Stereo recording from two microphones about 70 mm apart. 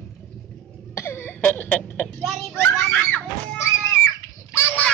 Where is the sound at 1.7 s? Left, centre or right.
Centre.